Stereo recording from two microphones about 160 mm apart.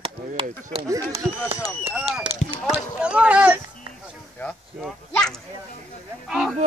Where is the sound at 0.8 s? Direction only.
20° right (ahead or behind).